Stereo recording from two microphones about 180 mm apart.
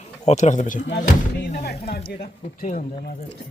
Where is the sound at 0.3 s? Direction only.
40° left (ahead or behind).